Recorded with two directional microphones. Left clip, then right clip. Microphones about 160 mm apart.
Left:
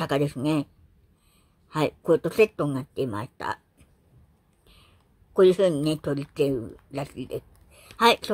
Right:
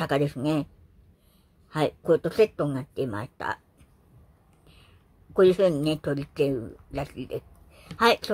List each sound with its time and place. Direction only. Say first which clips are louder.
0.0 s speech: even; 15° left (ahead or behind)
1.7 s speech: even; 15° left (ahead or behind)
5.3 s speech: left 1 dB; 10° left (ahead or behind)